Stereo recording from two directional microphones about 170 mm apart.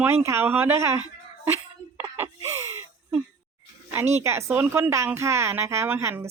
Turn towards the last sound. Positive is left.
turn(degrees=-15)  # may be behind; listen again after turning